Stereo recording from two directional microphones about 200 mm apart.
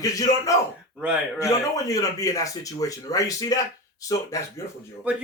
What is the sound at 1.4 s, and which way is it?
Speech, 15° left (ahead or behind).